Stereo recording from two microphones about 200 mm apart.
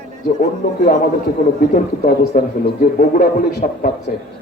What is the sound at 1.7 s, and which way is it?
A man's voice, 40° left (ahead or behind).